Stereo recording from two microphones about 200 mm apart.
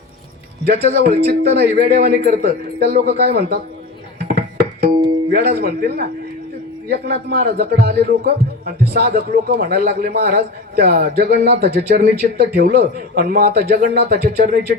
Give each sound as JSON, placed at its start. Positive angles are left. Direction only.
{"t": 0.6, "sound": "a man's voice", "side_deg": -55}
{"t": 4.3, "sound": "music", "side_deg": -50}
{"t": 5.3, "sound": "a man's voice", "side_deg": -50}